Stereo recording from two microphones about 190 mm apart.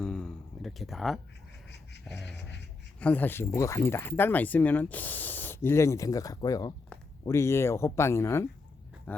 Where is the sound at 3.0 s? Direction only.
10° left (ahead or behind).